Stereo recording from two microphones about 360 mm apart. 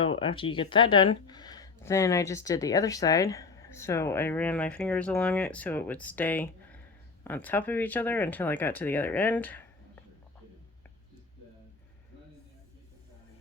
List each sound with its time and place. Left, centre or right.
0.0 s speech: centre